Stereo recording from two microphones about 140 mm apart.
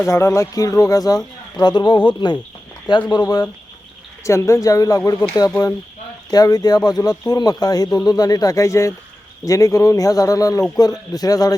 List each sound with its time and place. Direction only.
0.0 s speech: 20° left (ahead or behind)